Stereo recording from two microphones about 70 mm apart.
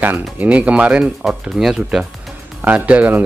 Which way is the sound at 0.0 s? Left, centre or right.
Right.